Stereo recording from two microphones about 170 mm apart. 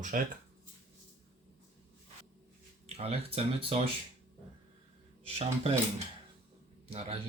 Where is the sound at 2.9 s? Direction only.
35° right (ahead or behind).